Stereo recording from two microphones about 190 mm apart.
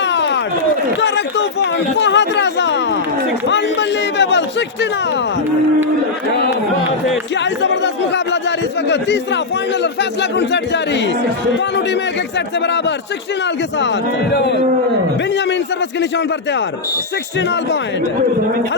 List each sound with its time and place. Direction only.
0.0 s run: 70° left (ahead or behind)
0.9 s a man's voice: 70° left (ahead or behind)
7.3 s a man's voice: 65° left (ahead or behind)
14.3 s speech: 65° left (ahead or behind)
16.0 s a man's voice: 65° left (ahead or behind)